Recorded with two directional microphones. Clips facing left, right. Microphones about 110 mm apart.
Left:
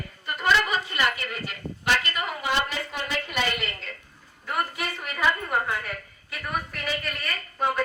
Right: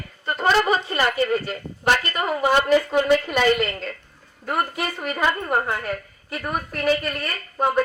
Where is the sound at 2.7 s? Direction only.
55° right (ahead or behind).